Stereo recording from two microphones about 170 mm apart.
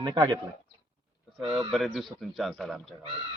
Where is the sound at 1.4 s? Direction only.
Centre (ahead or behind).